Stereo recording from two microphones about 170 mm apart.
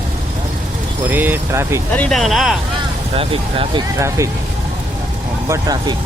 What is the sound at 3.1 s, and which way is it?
Speech, 35° right (ahead or behind).